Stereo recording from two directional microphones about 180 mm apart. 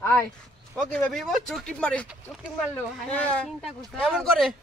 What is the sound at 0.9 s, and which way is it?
A man's voice, 5° left (ahead or behind).